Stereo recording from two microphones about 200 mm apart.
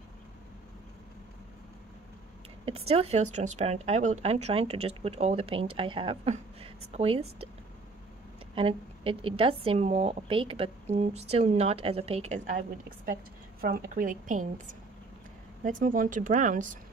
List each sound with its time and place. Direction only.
2.6 s speech: 30° right (ahead or behind)
8.5 s a woman's voice: 30° right (ahead or behind)
15.6 s speech: 45° right (ahead or behind)